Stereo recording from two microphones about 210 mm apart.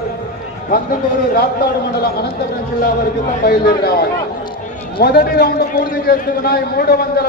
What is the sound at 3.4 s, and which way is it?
A man's voice, 45° left (ahead or behind).